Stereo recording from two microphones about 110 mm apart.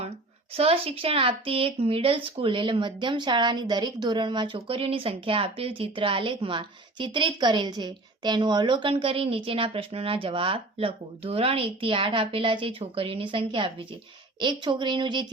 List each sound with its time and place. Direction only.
0.5 s speech: 65° right (ahead or behind); by 15.3 s 45° right (ahead or behind)